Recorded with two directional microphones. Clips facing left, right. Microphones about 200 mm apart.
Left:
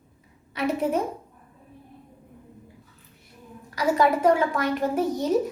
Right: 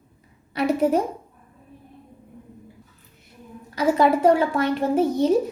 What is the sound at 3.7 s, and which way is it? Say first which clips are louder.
A woman's voice: right 3 dB; 30° right (ahead or behind).